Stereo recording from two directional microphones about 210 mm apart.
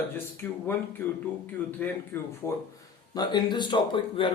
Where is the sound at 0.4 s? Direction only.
10° left (ahead or behind).